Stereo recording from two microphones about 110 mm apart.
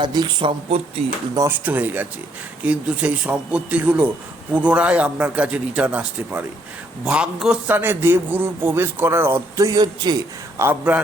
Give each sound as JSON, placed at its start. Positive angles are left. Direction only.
{"t": 0.0, "sound": "speech", "side_deg": -40}
{"t": 1.0, "sound": "speech", "side_deg": -65}
{"t": 1.5, "sound": "a man's voice", "side_deg": -15}
{"t": 7.7, "sound": "a man's voice", "side_deg": -20}
{"t": 10.6, "sound": "a man's voice", "side_deg": -20}